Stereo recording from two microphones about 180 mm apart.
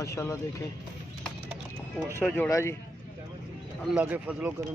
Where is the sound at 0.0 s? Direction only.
15° left (ahead or behind).